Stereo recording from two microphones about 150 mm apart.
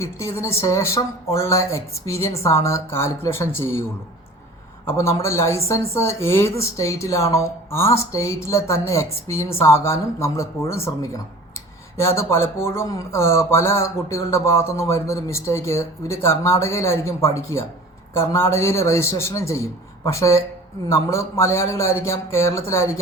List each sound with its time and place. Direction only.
0.0 s speech: 20° left (ahead or behind)
4.9 s speech: 20° left (ahead or behind)
11.9 s speech: 20° left (ahead or behind)